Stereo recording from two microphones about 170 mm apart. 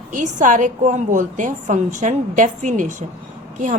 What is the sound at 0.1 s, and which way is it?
A woman's voice, 50° right (ahead or behind).